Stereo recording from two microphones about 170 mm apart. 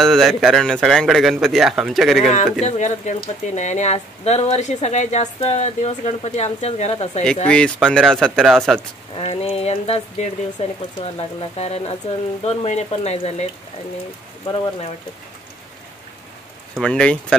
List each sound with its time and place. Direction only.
0.0 s a man's voice: centre (ahead or behind)
2.6 s a woman's voice: 45° left (ahead or behind)
7.4 s a man's voice: 5° left (ahead or behind)
9.1 s a woman's voice: 40° left (ahead or behind)
14.4 s speech: 25° left (ahead or behind)
16.8 s a man's voice: 5° left (ahead or behind)